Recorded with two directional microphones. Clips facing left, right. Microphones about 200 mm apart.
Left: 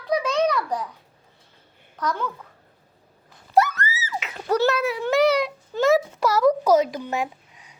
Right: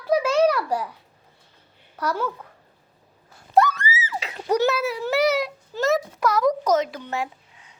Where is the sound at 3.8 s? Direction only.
15° right (ahead or behind).